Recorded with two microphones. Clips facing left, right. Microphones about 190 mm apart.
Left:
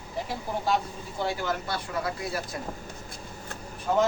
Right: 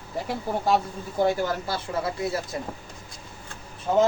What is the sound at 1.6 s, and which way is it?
Speech, 25° right (ahead or behind).